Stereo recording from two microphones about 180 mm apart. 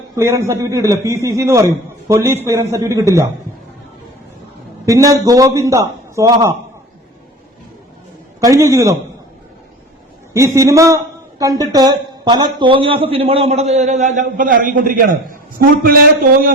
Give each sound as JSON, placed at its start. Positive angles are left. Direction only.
{"t": 0.2, "sound": "a man's voice", "side_deg": -15}
{"t": 4.9, "sound": "a man's voice", "side_deg": -20}
{"t": 8.4, "sound": "a man's voice", "side_deg": -15}
{"t": 10.3, "sound": "a man's voice", "side_deg": -15}